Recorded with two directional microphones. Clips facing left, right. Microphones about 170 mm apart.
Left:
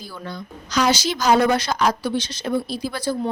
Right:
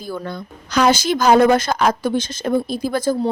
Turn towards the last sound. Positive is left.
turn(degrees=-50)  # may be behind; listen again after turning